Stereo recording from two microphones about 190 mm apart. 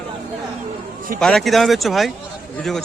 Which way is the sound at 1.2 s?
Centre (ahead or behind).